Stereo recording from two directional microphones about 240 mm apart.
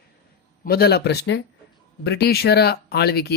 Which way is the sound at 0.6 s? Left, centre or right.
Left.